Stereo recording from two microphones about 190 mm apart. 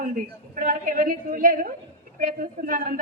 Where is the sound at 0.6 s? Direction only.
45° right (ahead or behind).